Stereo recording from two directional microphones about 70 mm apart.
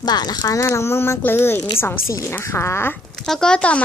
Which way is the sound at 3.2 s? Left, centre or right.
Centre.